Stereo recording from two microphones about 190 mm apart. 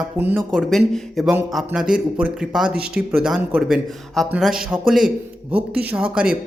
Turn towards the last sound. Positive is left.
turn(degrees=-5)  # may be behind; listen again after turning